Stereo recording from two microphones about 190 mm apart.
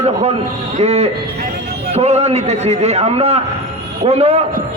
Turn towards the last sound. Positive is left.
turn(degrees=-35)  # may be behind; listen again after turning